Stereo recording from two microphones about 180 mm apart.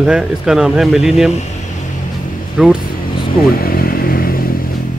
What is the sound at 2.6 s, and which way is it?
Speech, 5° right (ahead or behind).